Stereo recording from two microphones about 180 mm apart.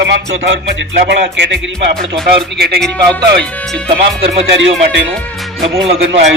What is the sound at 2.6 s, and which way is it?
Speech, 65° right (ahead or behind).